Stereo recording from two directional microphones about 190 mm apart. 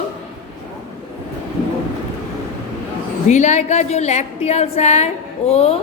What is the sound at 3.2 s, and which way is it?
A woman's voice, 40° left (ahead or behind).